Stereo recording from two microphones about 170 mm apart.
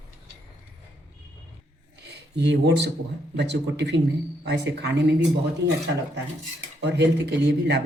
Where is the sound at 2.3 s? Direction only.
90° right.